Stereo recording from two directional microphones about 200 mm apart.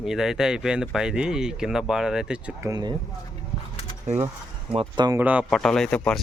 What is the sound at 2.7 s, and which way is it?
Speech, 20° right (ahead or behind).